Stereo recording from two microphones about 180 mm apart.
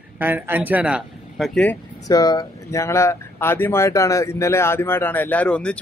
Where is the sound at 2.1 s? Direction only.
20° left (ahead or behind).